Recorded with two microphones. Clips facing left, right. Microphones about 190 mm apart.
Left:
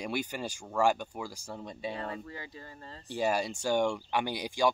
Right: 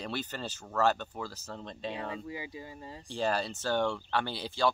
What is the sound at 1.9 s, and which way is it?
Speech, 10° right (ahead or behind).